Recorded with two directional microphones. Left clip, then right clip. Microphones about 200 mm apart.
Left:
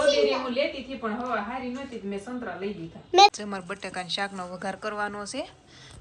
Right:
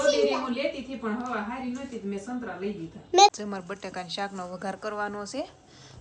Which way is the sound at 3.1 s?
5° right (ahead or behind).